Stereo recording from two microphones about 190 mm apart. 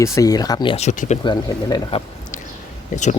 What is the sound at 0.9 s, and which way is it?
Speech, 40° left (ahead or behind).